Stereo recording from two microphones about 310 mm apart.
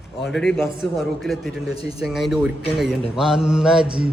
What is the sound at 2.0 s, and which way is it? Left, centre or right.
A man's voice, centre.